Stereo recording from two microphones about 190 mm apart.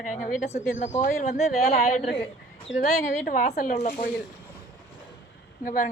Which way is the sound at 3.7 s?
35° left (ahead or behind).